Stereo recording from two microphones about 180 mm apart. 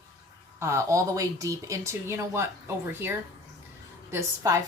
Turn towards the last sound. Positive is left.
turn(degrees=-15)  # may be behind; listen again after turning